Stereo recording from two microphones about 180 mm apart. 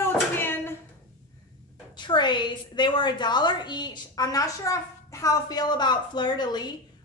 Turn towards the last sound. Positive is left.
turn(degrees=25)  # may be behind; listen again after turning